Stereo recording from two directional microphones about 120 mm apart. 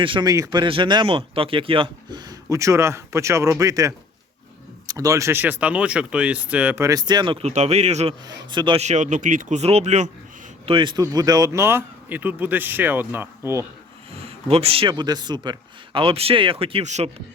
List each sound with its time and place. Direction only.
0.0 s speech: 45° right (ahead or behind)
0.3 s speech: 30° right (ahead or behind); by 6.8 s 10° right (ahead or behind)
6.8 s speech: 35° right (ahead or behind)
7.4 s speech: 65° right (ahead or behind)
8.3 s speech: 40° right (ahead or behind)
8.8 s speech: 80° right
10.7 s speech: 45° right (ahead or behind)
11.0 s speech: 30° right (ahead or behind)
14.1 s speech: 55° right (ahead or behind)
16.8 s speech: 75° right (ahead or behind)